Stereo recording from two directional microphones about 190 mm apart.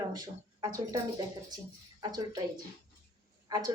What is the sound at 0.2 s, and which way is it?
A woman's voice, 20° right (ahead or behind).